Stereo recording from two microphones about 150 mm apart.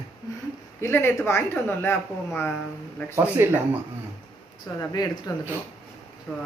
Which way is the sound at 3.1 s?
15° right (ahead or behind).